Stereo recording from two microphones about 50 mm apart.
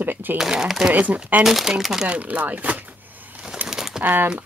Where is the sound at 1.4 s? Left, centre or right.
Centre.